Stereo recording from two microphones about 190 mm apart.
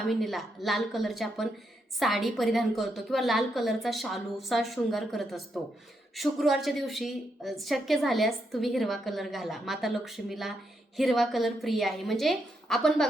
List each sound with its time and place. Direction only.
0.1 s a woman's voice: centre (ahead or behind)